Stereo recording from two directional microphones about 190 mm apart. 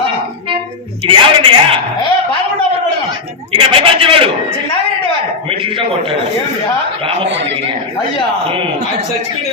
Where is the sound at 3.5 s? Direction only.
30° right (ahead or behind).